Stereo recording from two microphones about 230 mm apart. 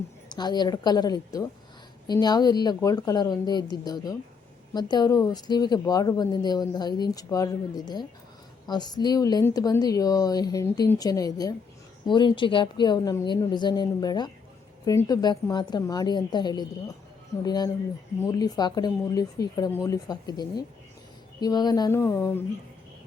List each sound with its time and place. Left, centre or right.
0.3 s speech: centre
8.6 s speech: centre